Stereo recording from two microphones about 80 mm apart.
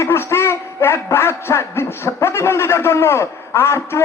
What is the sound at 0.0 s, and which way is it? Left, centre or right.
A man's voice, left.